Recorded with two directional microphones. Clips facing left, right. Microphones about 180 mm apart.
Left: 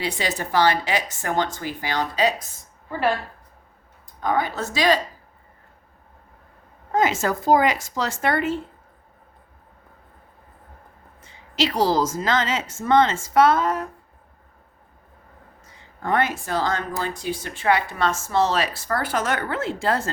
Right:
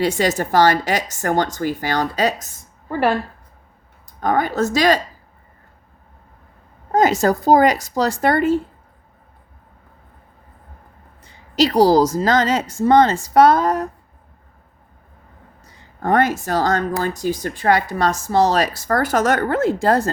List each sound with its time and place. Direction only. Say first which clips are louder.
0.0 s a woman's voice: right 8 dB; 45° right (ahead or behind)
4.2 s a woman's voice: right 5 dB; 50° right (ahead or behind)
6.9 s speech: right 6 dB; 40° right (ahead or behind)
11.5 s speech: right 7 dB; 40° right (ahead or behind)
15.6 s speech: right 6 dB; 40° right (ahead or behind)